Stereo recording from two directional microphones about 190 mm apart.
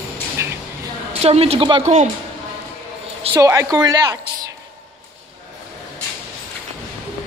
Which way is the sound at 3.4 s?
15° right (ahead or behind).